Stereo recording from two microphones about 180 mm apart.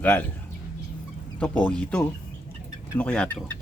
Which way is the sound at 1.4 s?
10° left (ahead or behind).